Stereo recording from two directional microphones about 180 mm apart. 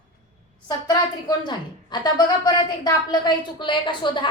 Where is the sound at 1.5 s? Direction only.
25° left (ahead or behind).